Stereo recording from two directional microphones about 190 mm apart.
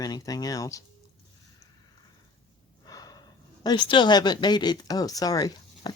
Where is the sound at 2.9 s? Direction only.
20° left (ahead or behind).